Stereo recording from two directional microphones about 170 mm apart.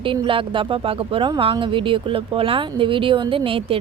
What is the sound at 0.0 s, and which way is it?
A woman's voice, 30° right (ahead or behind).